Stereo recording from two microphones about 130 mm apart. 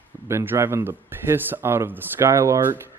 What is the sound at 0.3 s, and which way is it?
Speech, 20° right (ahead or behind).